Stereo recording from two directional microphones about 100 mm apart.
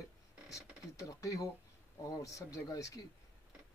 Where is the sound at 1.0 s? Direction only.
35° left (ahead or behind).